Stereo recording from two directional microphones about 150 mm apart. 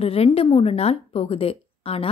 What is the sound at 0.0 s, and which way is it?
A woman's voice, 40° left (ahead or behind).